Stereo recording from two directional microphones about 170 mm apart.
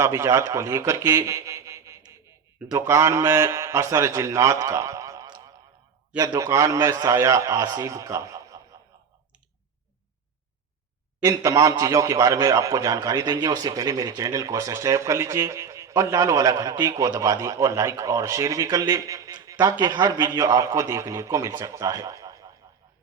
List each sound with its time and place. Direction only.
0.0 s a man's voice: 15° right (ahead or behind)
11.2 s a man's voice: 20° right (ahead or behind)